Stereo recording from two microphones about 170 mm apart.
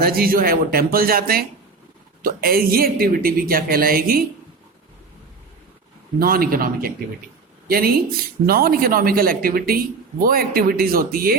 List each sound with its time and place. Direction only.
0.0 s speech: 60° right (ahead or behind)
6.1 s speech: 60° right (ahead or behind)